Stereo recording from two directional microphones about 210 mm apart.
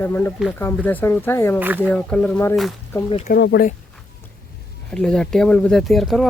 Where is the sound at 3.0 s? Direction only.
30° left (ahead or behind).